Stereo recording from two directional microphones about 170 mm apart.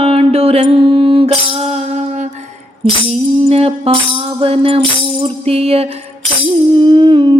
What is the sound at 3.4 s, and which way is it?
Music, 35° right (ahead or behind).